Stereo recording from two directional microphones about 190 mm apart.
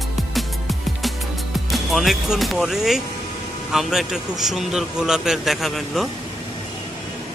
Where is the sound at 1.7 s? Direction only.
Centre (ahead or behind).